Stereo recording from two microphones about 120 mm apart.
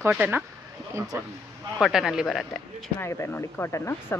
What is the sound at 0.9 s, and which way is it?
Speech, 30° right (ahead or behind).